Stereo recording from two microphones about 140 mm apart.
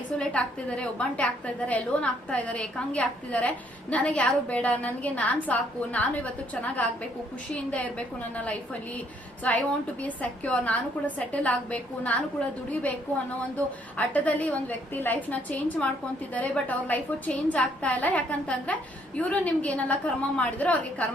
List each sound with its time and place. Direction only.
0.2 s a woman's voice: 5° left (ahead or behind)
13.9 s a woman's voice: 10° left (ahead or behind)